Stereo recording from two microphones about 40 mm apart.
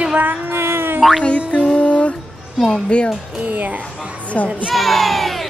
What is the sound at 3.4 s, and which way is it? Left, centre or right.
Speech, right.